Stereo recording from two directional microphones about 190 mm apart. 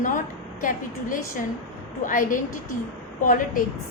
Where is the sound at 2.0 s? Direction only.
45° left (ahead or behind).